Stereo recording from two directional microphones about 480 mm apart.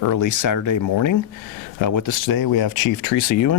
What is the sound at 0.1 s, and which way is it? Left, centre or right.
Speech, left.